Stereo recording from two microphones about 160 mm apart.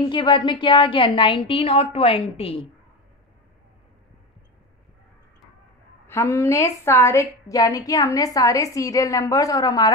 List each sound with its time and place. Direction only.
0.1 s a woman's voice: 30° left (ahead or behind)
6.0 s a woman's voice: 15° left (ahead or behind)